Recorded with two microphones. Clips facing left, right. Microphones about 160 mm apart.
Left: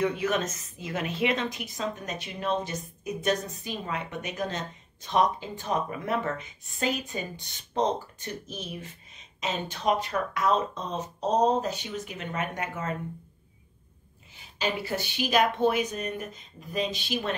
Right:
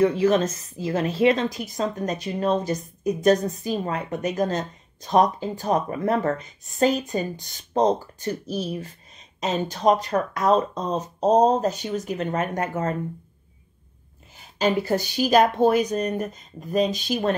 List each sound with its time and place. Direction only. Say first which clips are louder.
0.0 s a woman's voice: right 8 dB; 30° right (ahead or behind)
14.3 s a woman's voice: right 8 dB; 45° right (ahead or behind)